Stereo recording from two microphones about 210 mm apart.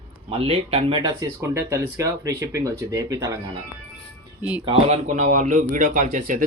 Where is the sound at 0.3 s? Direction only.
25° right (ahead or behind).